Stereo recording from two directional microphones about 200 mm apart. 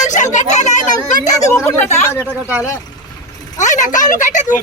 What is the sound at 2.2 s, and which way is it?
Speech, 5° right (ahead or behind).